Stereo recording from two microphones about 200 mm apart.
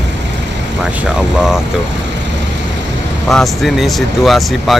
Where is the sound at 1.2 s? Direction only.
5° right (ahead or behind).